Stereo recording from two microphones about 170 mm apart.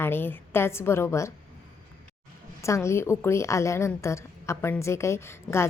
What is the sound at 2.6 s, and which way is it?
A woman's voice, 15° left (ahead or behind).